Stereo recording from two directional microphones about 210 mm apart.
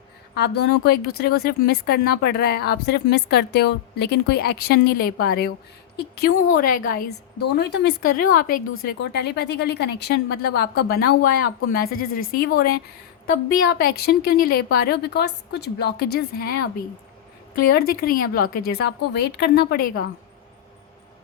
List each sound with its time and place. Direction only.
0.3 s speech: 50° left (ahead or behind)
7.6 s speech: 50° left (ahead or behind)